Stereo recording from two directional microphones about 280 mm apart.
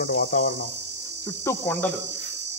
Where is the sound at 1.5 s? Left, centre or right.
Centre.